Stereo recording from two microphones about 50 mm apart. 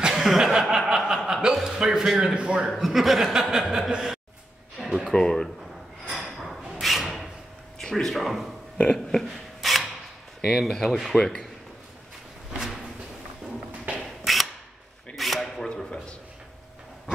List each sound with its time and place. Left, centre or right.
0.0 s chuckle: centre
2.3 s a man's voice: centre
2.8 s a man's voice: centre
4.8 s music: centre
5.1 s speech: centre
6.0 s a sound: centre
7.8 s speech: centre
9.3 s rub: centre
10.7 s speech: centre
11.1 s speech: centre
12.5 s a sound: centre
14.0 s a sound: centre